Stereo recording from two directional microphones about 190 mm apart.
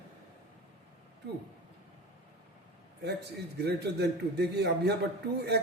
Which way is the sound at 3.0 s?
60° right (ahead or behind).